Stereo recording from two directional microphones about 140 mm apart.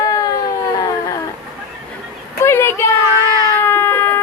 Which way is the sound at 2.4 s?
20° left (ahead or behind).